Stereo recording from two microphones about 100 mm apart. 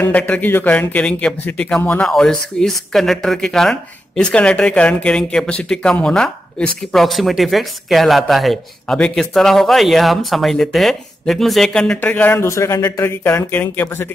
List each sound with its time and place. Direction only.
0.0 s speech: 15° left (ahead or behind)
12.0 s speech: 20° left (ahead or behind)